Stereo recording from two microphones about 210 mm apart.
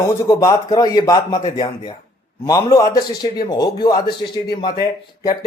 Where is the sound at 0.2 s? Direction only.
15° left (ahead or behind).